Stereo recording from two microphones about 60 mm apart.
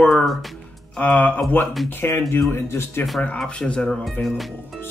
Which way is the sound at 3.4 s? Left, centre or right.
Centre.